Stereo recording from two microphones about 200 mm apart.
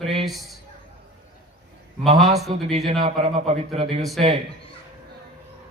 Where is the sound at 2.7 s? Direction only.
30° right (ahead or behind).